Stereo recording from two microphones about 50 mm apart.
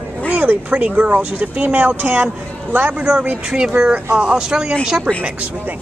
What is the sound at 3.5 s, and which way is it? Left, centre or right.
Speech, centre.